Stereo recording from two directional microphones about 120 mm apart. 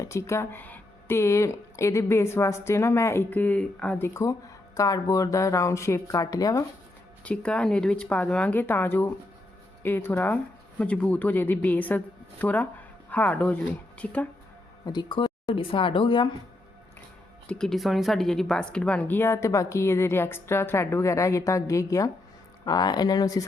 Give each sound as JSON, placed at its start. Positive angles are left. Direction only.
{"t": 0.0, "sound": "speech", "side_deg": 25}
{"t": 4.0, "sound": "speech", "side_deg": 25}
{"t": 7.3, "sound": "speech", "side_deg": 10}
{"t": 14.8, "sound": "speech", "side_deg": 40}
{"t": 17.4, "sound": "speech", "side_deg": 5}